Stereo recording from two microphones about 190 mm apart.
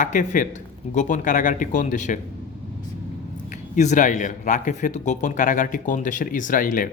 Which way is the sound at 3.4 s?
40° left (ahead or behind).